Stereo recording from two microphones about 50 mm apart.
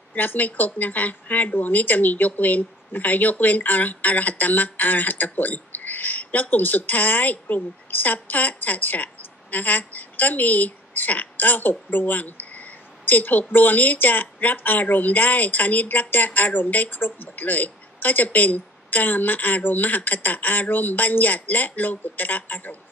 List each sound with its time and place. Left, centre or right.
0.1 s speech: left